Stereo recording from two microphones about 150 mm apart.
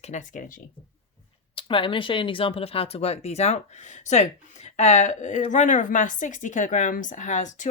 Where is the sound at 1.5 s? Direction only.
35° left (ahead or behind).